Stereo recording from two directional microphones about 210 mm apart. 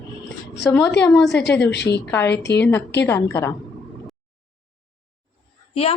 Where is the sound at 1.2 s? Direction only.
55° left (ahead or behind).